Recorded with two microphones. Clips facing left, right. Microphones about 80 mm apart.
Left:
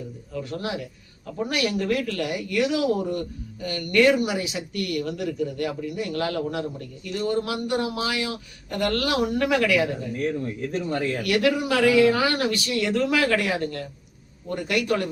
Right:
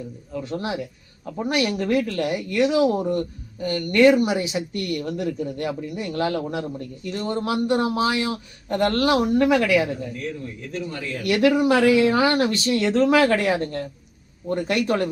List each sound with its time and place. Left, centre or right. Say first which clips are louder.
0.3 s speech: right 2 dB; right
10.4 s speech: left 3 dB; left
11.2 s speech: right 6 dB; right